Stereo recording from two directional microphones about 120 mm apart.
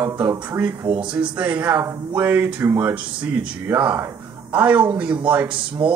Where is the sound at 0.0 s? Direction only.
20° right (ahead or behind).